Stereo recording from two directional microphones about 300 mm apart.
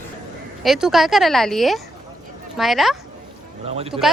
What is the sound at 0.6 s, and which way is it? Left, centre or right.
Speech, centre.